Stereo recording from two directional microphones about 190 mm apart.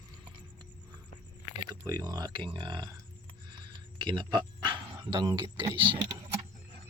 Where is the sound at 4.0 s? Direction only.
25° right (ahead or behind).